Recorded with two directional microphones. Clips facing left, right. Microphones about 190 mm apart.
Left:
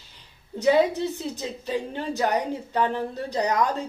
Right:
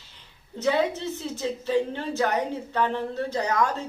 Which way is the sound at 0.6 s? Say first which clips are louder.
Left 4 dB; 15° left (ahead or behind).